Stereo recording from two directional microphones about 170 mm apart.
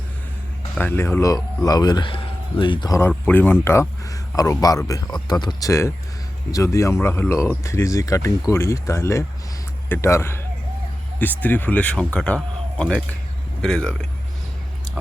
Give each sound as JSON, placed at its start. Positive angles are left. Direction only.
{"t": 0.8, "sound": "speech", "side_deg": 10}
{"t": 3.0, "sound": "speech", "side_deg": 10}